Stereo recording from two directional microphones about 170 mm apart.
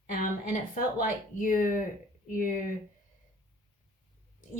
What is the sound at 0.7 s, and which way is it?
A woman's voice, 55° left (ahead or behind).